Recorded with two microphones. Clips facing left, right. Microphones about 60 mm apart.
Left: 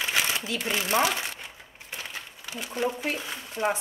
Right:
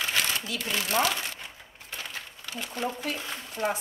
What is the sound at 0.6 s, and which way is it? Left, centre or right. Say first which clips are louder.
Speech: left 2 dB; left.